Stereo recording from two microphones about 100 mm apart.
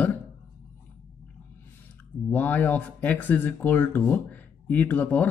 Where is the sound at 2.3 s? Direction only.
20° left (ahead or behind).